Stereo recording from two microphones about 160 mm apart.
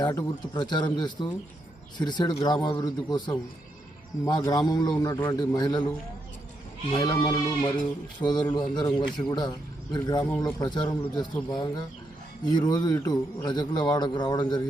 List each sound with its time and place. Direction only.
0.5 s a man's voice: 30° left (ahead or behind)
6.9 s a man's voice: 25° left (ahead or behind)